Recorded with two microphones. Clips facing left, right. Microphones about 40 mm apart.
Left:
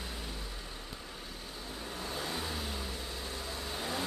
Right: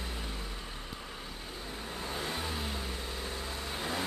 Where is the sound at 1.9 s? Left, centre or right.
Right.